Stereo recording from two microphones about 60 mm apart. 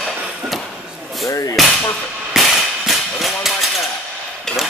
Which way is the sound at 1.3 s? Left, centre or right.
Left.